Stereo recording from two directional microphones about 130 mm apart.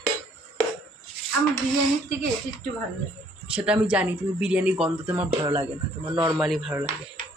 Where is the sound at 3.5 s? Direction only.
10° right (ahead or behind).